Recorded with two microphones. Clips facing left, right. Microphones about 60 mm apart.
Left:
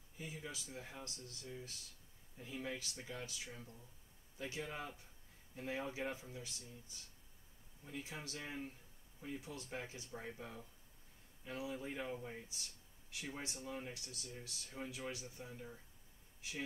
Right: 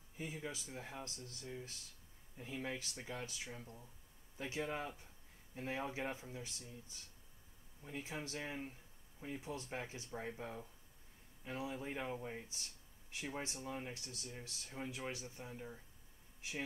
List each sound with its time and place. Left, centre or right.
0.2 s speech: right
7.8 s speech: right
13.9 s speech: right